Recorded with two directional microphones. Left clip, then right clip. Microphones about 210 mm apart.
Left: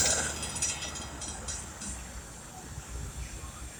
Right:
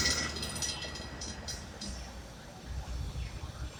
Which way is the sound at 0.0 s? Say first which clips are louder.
Left 2 dB; 45° right (ahead or behind).